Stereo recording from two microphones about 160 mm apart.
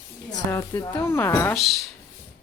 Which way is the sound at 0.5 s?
20° left (ahead or behind).